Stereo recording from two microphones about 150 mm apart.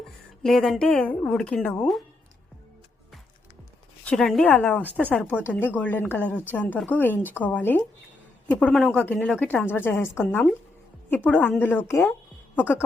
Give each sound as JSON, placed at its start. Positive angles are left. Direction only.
{"t": 0.0, "sound": "speech", "side_deg": 0}
{"t": 4.0, "sound": "a woman's voice", "side_deg": 5}